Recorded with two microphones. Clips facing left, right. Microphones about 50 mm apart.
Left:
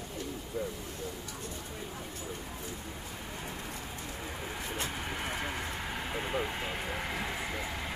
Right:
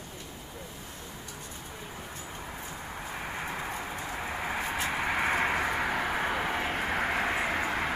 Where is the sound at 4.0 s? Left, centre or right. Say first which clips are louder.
Right 6 dB; right.